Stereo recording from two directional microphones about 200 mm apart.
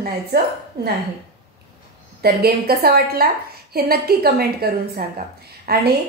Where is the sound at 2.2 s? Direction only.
50° right (ahead or behind).